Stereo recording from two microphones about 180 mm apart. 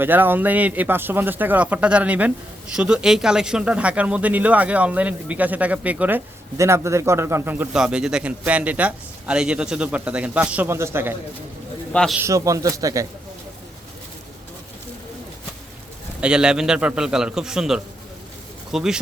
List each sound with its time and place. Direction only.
0.0 s speech: 10° right (ahead or behind)
12.2 s speech: 20° right (ahead or behind)
16.2 s a man's voice: 5° right (ahead or behind)